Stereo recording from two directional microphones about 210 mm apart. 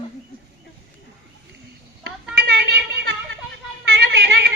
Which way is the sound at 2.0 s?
50° right (ahead or behind).